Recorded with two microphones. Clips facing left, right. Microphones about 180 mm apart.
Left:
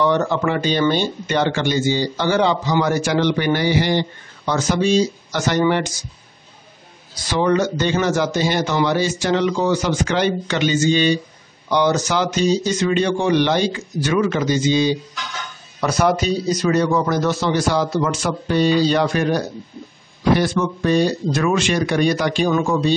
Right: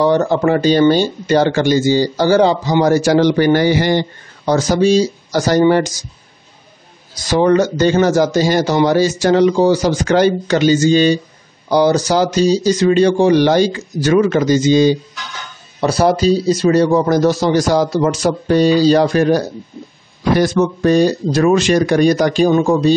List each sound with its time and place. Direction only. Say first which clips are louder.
0.0 s speech: right 5 dB; 35° right (ahead or behind)
7.2 s speech: right 5 dB; 45° right (ahead or behind)
15.8 s speech: right 5 dB; 30° right (ahead or behind)